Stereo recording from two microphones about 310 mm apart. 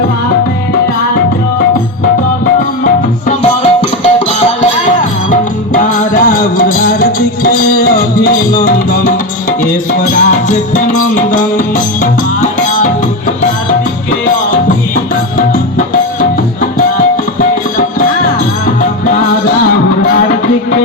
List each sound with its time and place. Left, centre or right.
3.4 s music: left
10.3 s music: left